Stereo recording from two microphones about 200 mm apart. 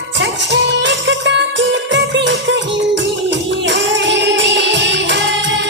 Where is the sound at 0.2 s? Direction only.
60° right (ahead or behind).